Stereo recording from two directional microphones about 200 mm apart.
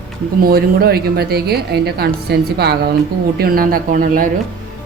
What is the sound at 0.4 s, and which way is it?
A woman's voice, 50° right (ahead or behind).